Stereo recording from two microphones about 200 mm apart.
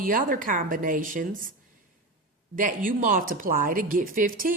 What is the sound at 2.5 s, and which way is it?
Speech, 45° right (ahead or behind).